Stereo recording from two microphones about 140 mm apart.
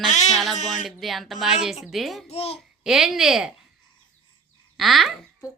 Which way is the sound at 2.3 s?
45° left (ahead or behind).